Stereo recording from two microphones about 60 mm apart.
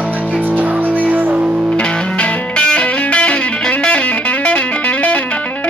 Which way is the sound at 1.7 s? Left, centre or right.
Centre.